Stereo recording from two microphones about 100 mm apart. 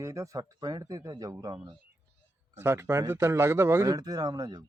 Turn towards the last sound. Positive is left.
turn(degrees=-40)  # may be behind; listen again after turning